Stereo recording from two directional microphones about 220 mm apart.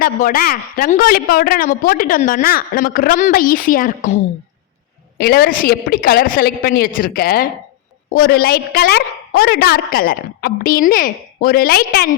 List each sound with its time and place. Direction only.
0.0 s a woman's voice: 40° left (ahead or behind)
5.1 s a woman's voice: 45° left (ahead or behind)